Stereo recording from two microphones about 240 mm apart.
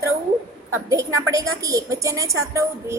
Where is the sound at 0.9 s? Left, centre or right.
Centre.